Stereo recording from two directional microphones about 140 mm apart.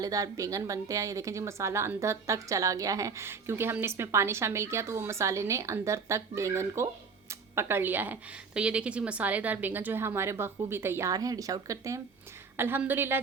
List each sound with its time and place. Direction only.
0.0 s speech: 25° right (ahead or behind)